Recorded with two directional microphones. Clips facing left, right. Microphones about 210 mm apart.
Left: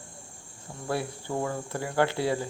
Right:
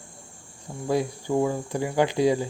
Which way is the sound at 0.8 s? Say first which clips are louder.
Right 6 dB; 15° right (ahead or behind).